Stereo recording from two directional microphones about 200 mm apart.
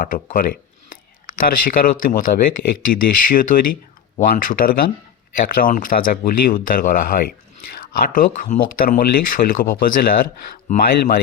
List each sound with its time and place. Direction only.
0.0 s speech: 45° left (ahead or behind)